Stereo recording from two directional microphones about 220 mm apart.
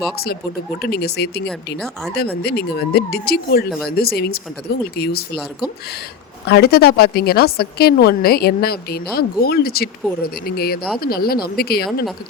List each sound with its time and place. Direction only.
0.8 s a woman's voice: 45° left (ahead or behind)
6.4 s a woman's voice: 45° left (ahead or behind)